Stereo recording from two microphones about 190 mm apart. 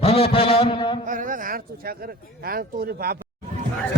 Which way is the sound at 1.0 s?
45° right (ahead or behind).